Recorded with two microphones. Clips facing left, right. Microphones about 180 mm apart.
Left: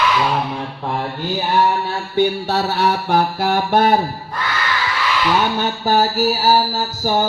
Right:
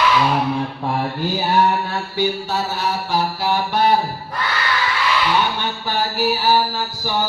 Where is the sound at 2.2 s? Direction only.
65° left (ahead or behind); by 3.9 s 50° left (ahead or behind).